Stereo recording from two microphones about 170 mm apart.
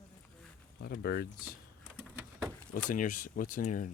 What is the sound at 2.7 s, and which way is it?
Speech, 50° left (ahead or behind).